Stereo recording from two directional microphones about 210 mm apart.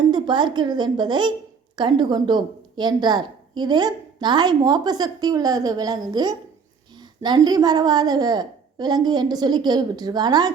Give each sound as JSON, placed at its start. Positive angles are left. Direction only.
{"t": 0.1, "sound": "a woman's voice", "side_deg": -20}